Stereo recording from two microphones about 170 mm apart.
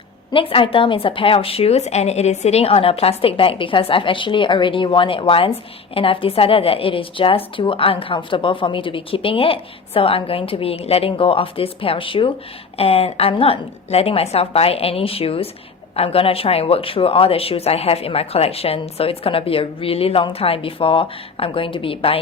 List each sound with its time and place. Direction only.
0.3 s a woman's voice: 30° left (ahead or behind)